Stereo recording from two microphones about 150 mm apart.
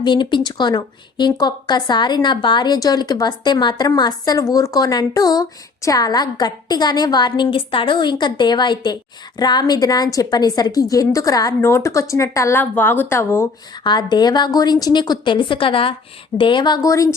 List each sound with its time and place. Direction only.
0.0 s a woman's voice: 30° left (ahead or behind)
13.8 s a woman's voice: 30° left (ahead or behind)